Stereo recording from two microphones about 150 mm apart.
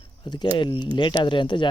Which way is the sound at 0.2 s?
30° left (ahead or behind).